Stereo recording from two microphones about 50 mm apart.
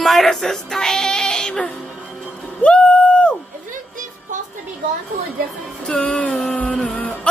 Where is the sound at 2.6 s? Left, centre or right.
Left.